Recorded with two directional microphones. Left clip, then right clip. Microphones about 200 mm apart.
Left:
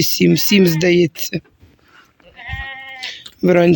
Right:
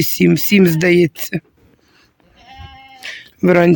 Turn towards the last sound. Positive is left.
turn(degrees=-5)  # may be behind; listen again after turning